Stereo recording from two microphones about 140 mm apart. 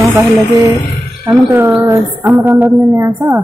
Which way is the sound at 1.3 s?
15° right (ahead or behind).